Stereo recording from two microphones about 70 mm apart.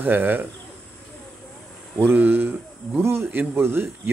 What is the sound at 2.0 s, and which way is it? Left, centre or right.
Speech, right.